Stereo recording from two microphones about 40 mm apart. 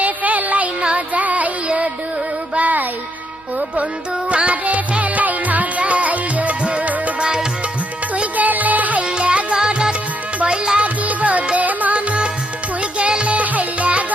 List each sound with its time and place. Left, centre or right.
0.0 s a sound: right
0.8 s child singing: right
2.6 s music: right
4.3 s music: right
7.2 s music: right
8.1 s music: right
9.0 s music: right
10.8 s music: right
13.3 s music: right